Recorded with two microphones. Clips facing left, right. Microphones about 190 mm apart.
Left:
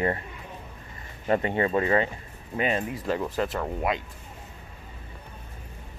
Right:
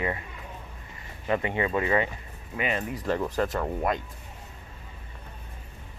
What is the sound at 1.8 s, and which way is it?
Speech, 30° left (ahead or behind).